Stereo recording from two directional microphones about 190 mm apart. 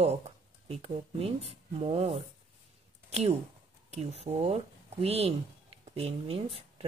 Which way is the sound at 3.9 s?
35° right (ahead or behind).